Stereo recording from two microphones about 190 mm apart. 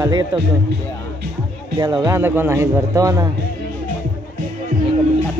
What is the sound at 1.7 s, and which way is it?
A man's voice, 20° right (ahead or behind).